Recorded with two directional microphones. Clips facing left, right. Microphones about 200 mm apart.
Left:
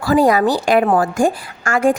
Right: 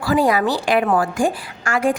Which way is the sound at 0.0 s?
45° left (ahead or behind).